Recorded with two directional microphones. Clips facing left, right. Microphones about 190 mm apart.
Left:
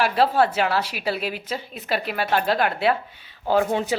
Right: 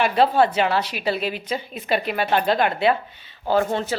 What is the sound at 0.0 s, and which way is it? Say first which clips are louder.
A woman's voice: right 2 dB; 5° left (ahead or behind).